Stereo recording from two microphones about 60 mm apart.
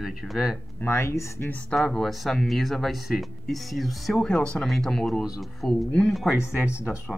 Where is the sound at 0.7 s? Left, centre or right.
Left.